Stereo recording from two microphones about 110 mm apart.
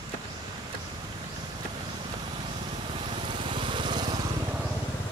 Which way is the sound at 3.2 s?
45° right (ahead or behind).